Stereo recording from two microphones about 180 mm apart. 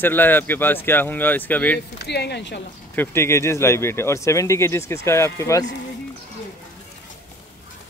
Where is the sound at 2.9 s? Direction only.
15° left (ahead or behind).